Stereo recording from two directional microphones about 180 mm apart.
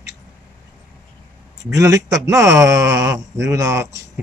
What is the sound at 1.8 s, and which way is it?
Speech, 15° right (ahead or behind).